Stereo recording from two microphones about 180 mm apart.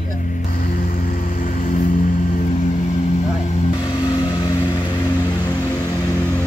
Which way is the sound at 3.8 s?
25° left (ahead or behind).